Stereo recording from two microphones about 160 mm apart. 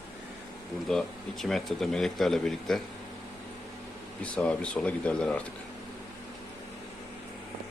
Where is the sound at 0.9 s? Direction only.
Centre (ahead or behind).